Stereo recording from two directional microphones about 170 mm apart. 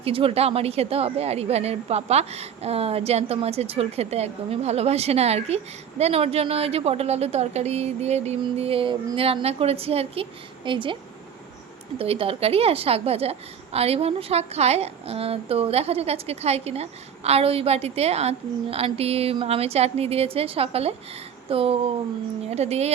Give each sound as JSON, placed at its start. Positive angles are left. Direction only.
{"t": 0.0, "sound": "a woman's voice", "side_deg": -35}
{"t": 11.9, "sound": "a woman's voice", "side_deg": -35}